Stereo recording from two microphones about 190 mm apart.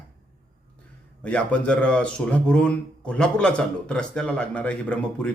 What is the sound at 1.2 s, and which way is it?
A man's voice, 5° left (ahead or behind).